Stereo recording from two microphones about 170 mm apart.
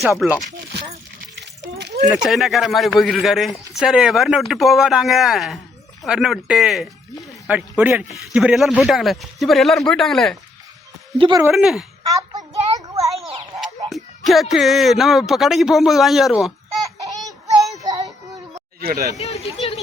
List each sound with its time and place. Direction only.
2.1 s speech: centre (ahead or behind)
11.2 s speech: 25° right (ahead or behind)
11.5 s speech: centre (ahead or behind)
12.0 s child singing: 20° right (ahead or behind)
13.6 s speech: centre (ahead or behind)
18.8 s speech: 60° right (ahead or behind)
19.1 s speech: 40° left (ahead or behind)